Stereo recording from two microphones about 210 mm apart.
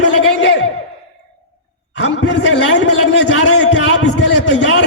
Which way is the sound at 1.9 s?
60° left (ahead or behind).